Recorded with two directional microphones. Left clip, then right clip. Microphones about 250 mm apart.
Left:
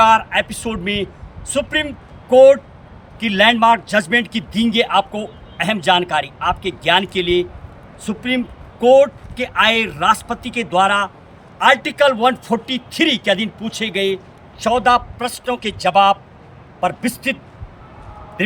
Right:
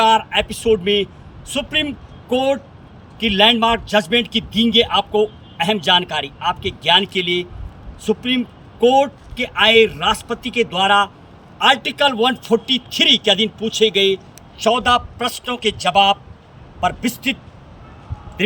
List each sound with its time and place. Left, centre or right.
0.0 s a man's voice: centre